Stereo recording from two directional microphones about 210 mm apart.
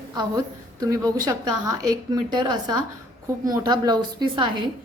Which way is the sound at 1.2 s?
15° right (ahead or behind).